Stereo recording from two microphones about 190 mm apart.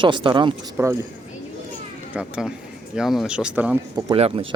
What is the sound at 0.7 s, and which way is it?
Speech, 15° right (ahead or behind).